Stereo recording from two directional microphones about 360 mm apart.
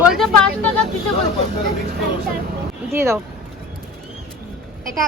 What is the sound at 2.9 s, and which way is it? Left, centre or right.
Speech, centre.